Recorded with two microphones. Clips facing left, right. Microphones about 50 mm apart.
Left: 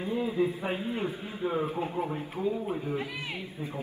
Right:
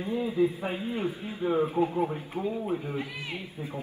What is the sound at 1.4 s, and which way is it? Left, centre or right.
Speech, centre.